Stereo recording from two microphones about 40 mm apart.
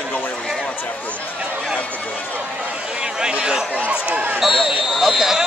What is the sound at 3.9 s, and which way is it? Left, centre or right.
Speech, right.